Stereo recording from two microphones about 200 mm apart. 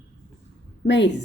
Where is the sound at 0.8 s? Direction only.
60° left (ahead or behind).